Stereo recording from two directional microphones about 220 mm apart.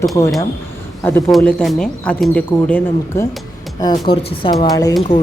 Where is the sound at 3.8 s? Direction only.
20° left (ahead or behind).